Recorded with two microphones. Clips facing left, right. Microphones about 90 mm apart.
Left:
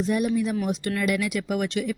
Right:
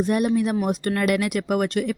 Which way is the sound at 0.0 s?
55° right (ahead or behind).